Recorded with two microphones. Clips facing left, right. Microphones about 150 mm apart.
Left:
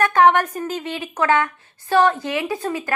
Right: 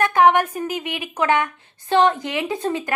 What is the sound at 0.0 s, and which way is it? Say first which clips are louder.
A woman's voice: even; 15° right (ahead or behind).